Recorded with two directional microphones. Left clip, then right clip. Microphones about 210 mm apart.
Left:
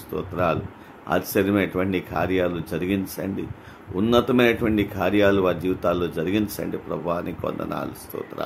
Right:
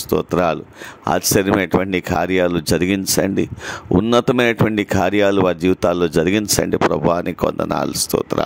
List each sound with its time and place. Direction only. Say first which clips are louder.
0.1 s speech: right 7 dB; 50° right (ahead or behind)